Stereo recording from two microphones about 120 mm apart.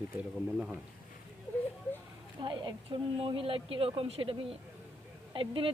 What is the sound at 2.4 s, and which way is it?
A woman's voice, 40° right (ahead or behind).